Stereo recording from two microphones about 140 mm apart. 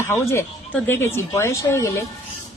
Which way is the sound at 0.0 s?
20° left (ahead or behind).